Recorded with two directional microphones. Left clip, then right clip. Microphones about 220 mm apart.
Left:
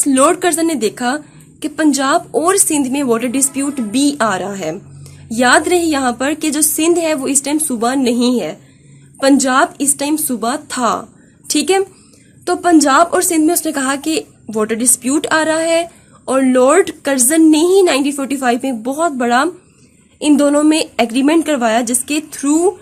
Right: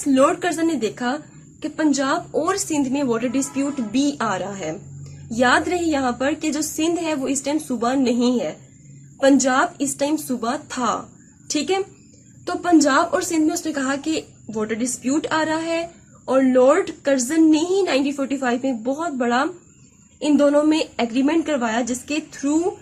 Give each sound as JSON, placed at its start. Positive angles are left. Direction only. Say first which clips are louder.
{"t": 0.0, "sound": "a woman's voice", "louder": "left 5 dB", "side_deg": 45}